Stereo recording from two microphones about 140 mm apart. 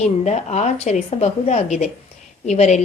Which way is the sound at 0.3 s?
55° left (ahead or behind).